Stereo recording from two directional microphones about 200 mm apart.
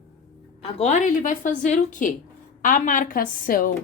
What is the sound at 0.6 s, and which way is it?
A woman's voice, 35° left (ahead or behind).